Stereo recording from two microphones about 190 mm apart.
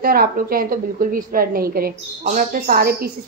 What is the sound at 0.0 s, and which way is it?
A woman's voice, 50° right (ahead or behind).